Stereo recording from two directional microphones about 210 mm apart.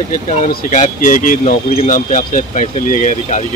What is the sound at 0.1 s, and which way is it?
Speech, 40° left (ahead or behind).